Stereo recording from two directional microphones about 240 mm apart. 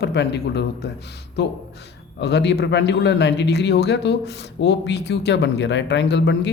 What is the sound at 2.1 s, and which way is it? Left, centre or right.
A man's voice, left.